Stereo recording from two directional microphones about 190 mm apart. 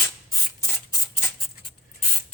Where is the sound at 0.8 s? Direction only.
15° left (ahead or behind).